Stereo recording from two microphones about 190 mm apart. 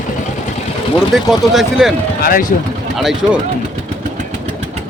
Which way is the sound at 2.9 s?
Centre (ahead or behind).